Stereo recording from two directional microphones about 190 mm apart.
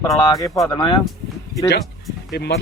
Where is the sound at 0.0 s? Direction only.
20° left (ahead or behind).